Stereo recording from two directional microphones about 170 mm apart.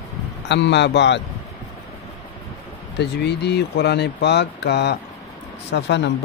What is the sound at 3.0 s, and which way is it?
Speech, 80° left.